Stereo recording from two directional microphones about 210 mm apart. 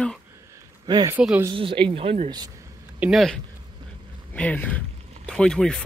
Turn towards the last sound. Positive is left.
turn(degrees=5)  # may be behind; listen again after turning